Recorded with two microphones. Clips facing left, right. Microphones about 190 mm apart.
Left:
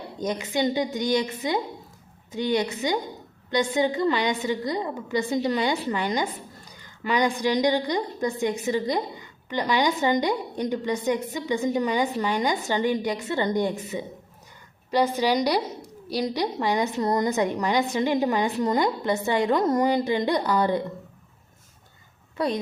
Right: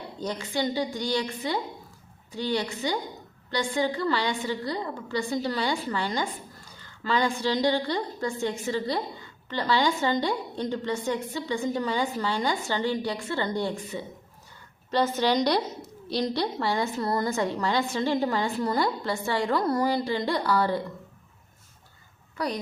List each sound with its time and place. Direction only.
0.2 s a woman's voice: 20° left (ahead or behind)
22.4 s a woman's voice: 25° left (ahead or behind)